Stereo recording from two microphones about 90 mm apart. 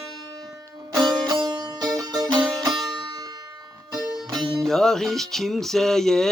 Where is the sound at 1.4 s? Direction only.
50° right (ahead or behind).